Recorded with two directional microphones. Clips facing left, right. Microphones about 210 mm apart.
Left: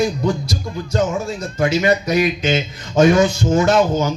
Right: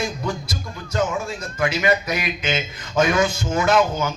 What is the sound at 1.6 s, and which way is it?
Speech, 40° left (ahead or behind).